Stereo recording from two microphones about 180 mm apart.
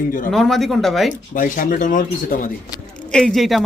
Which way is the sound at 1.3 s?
45° left (ahead or behind).